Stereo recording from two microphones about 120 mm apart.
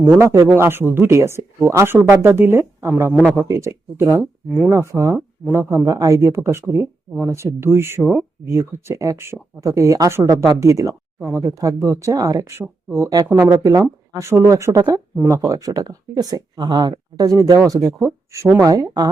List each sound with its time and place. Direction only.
0.2 s speech: 25° right (ahead or behind)
3.3 s speech: 25° right (ahead or behind)